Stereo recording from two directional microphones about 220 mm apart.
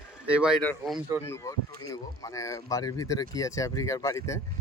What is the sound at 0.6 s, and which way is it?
Speech, 5° left (ahead or behind).